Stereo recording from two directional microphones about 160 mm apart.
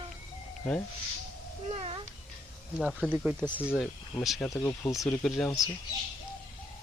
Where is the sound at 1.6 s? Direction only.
40° right (ahead or behind).